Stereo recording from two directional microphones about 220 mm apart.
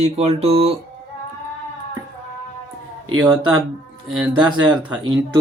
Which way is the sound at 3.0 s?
20° right (ahead or behind).